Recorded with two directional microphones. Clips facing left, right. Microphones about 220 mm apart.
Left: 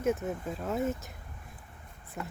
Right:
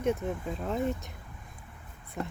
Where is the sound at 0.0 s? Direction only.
5° left (ahead or behind).